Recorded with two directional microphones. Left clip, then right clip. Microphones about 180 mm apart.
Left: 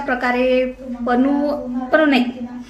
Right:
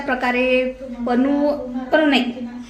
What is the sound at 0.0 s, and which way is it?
A woman's voice, 10° right (ahead or behind).